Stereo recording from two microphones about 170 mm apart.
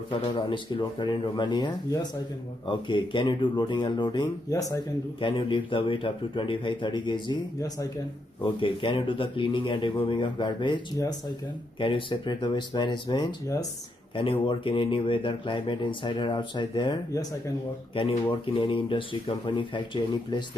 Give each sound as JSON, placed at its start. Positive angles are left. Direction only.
{"t": 0.1, "sound": "speech", "side_deg": 30}